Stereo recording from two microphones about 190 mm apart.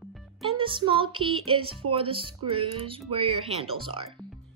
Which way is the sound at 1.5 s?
30° right (ahead or behind).